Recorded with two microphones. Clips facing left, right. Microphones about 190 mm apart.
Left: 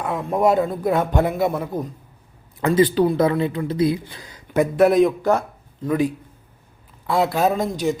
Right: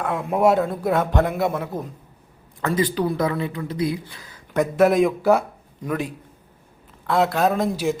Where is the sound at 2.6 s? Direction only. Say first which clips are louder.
Left 5 dB; 20° left (ahead or behind).